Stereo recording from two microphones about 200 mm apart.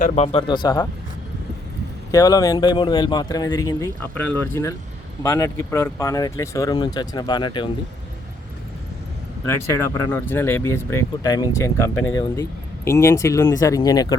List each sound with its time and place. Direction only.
0.0 s speech: 30° left (ahead or behind)
2.1 s speech: 15° left (ahead or behind)
9.5 s speech: 10° left (ahead or behind)